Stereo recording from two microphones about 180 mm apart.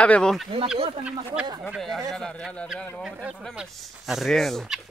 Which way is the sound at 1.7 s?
Centre (ahead or behind).